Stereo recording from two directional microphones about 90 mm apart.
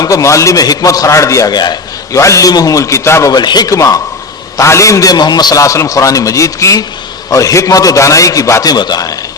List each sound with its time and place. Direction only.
0.0 s a man's voice: 35° left (ahead or behind)
3.3 s a man's voice: 50° left (ahead or behind)
8.7 s a man's voice: 50° left (ahead or behind)